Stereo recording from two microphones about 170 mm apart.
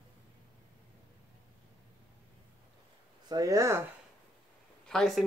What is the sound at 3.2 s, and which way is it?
Speech, 20° right (ahead or behind).